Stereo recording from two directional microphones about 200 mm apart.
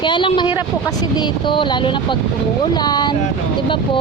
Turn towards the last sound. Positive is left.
turn(degrees=20)  # may be behind; listen again after turning